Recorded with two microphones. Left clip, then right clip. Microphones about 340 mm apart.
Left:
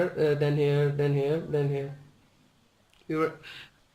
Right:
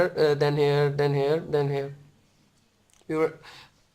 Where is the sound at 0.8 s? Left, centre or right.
Right.